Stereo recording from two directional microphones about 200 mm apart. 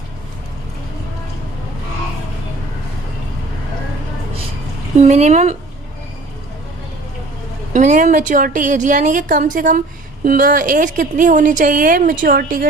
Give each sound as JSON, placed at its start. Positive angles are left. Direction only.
{"t": 4.9, "sound": "a woman's voice", "side_deg": -35}
{"t": 7.7, "sound": "a woman's voice", "side_deg": -40}